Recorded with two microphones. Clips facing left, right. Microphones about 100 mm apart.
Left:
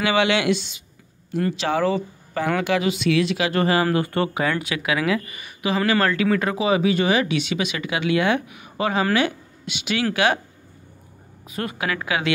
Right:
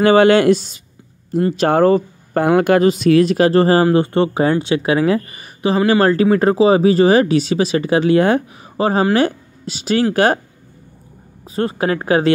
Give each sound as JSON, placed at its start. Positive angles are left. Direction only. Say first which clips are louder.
{"t": 0.0, "sound": "speech", "louder": "right 10 dB", "side_deg": -45}
{"t": 3.8, "sound": "speech", "louder": "right 7 dB", "side_deg": -25}
{"t": 11.4, "sound": "speech", "louder": "right 8 dB", "side_deg": -30}